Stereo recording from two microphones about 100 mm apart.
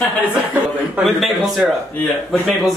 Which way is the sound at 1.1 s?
Centre (ahead or behind).